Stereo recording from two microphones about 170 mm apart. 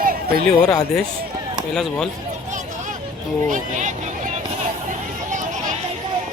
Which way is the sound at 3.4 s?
45° right (ahead or behind).